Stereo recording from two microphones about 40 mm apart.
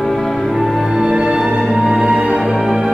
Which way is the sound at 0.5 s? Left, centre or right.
Centre.